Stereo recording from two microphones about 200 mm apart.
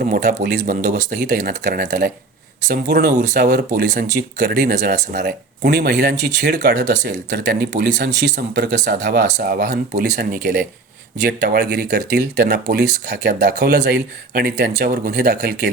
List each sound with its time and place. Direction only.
0.0 s a man's voice: 45° right (ahead or behind)
1.4 s speech: 50° right (ahead or behind)